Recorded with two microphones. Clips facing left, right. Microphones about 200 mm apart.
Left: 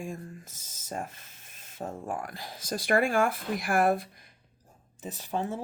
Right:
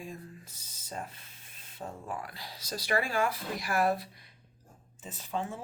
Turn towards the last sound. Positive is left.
turn(degrees=40)  # may be behind; listen again after turning